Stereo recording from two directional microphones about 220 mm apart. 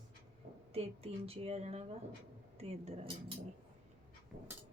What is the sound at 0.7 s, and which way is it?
A woman's voice, 25° right (ahead or behind).